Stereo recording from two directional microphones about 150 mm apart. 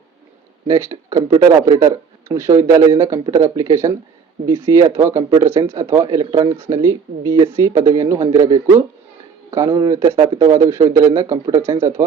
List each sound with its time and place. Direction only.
0.7 s speech: 20° right (ahead or behind)